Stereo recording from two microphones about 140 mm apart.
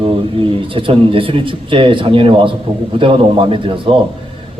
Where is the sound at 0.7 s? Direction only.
40° right (ahead or behind).